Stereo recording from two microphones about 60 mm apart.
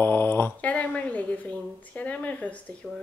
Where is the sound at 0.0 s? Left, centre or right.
Left.